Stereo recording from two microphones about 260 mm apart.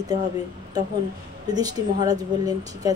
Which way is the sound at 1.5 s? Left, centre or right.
Centre.